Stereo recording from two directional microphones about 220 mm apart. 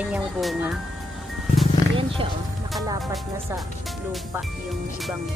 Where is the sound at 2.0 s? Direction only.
25° right (ahead or behind).